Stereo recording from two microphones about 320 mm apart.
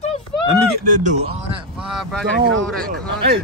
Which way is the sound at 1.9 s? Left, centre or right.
Centre.